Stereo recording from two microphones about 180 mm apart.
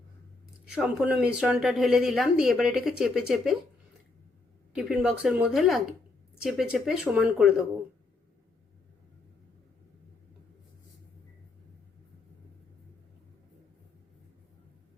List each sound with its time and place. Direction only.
0.7 s a woman's voice: 5° right (ahead or behind)
4.7 s a woman's voice: 5° right (ahead or behind)